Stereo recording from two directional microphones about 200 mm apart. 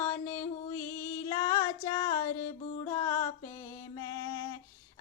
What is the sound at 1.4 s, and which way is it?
Music, 20° left (ahead or behind).